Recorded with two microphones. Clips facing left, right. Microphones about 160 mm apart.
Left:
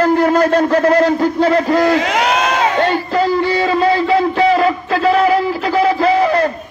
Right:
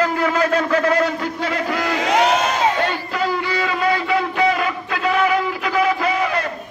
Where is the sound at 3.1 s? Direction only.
35° left (ahead or behind).